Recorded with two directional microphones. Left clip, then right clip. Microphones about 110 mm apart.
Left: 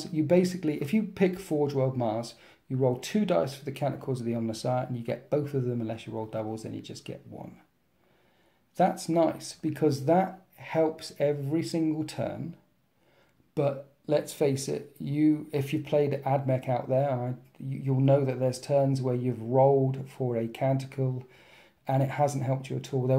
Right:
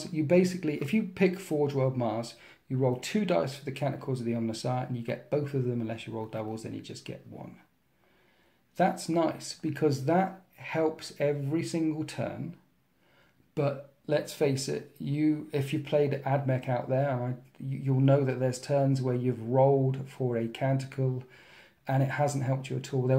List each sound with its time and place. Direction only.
0.0 s speech: 25° left (ahead or behind)
8.7 s speech: 25° left (ahead or behind)
13.6 s speech: 30° left (ahead or behind)